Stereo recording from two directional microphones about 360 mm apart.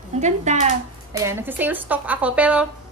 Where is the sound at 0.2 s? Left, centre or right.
Centre.